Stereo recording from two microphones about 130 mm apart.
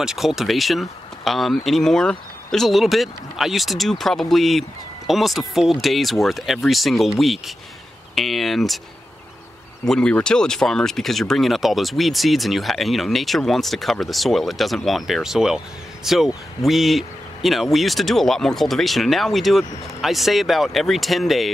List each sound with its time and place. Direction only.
0.0 s speech: 5° right (ahead or behind)
9.8 s speech: 10° left (ahead or behind)